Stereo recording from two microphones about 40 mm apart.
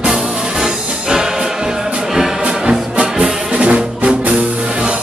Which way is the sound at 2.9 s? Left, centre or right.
Right.